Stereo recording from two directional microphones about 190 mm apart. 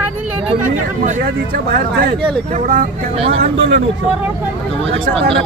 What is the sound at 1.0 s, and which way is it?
Speech, 45° right (ahead or behind).